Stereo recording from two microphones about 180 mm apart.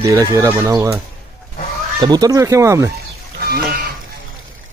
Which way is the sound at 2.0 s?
20° right (ahead or behind).